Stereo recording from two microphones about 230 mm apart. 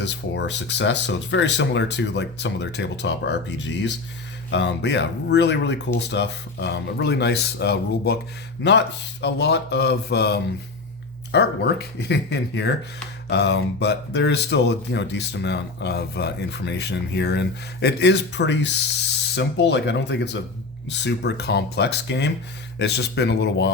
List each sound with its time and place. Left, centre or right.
0.0 s speech: left
9.2 s speech: left